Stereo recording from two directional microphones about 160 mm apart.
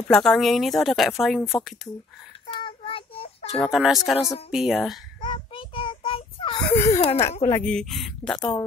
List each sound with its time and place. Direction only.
0.1 s speech: centre (ahead or behind)
2.5 s child singing: 35° left (ahead or behind)
3.5 s speech: 5° left (ahead or behind)
5.2 s child singing: 35° left (ahead or behind)
6.9 s speech: 40° left (ahead or behind)
7.6 s speech: 5° left (ahead or behind)